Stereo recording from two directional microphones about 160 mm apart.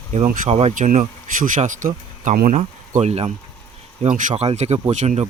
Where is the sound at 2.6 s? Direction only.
45° right (ahead or behind).